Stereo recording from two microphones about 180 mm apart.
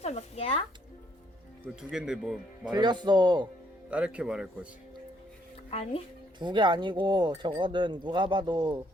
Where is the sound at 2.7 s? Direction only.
25° right (ahead or behind).